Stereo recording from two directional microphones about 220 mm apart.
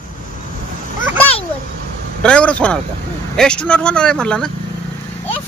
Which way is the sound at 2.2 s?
5° left (ahead or behind).